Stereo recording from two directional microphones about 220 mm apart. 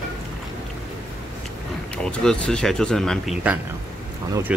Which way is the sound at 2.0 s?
5° left (ahead or behind).